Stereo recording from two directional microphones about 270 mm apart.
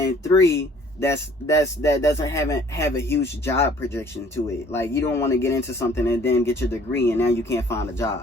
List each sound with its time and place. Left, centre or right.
0.3 s speech: centre